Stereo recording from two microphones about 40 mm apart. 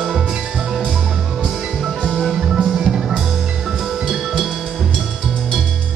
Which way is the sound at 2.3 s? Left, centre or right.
Centre.